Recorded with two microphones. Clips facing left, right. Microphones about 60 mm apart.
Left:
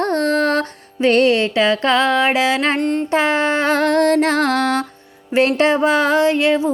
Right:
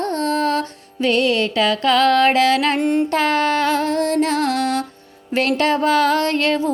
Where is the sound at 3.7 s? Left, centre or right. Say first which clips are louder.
Left 4 dB; left.